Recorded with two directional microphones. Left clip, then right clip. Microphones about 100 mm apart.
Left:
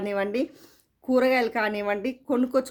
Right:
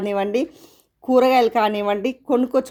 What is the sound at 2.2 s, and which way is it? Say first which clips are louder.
Speech: right 5 dB; 25° right (ahead or behind).